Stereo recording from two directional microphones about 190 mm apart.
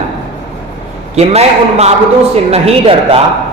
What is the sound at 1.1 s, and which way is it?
A man's voice, 35° right (ahead or behind).